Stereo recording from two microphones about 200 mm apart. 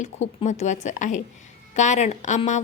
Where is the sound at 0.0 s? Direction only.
35° left (ahead or behind).